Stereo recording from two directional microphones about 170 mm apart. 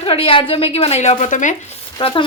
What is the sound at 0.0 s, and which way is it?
A woman's voice, 35° left (ahead or behind).